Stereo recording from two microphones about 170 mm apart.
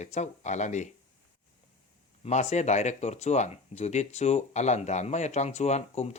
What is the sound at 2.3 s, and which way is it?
Speech, 40° left (ahead or behind).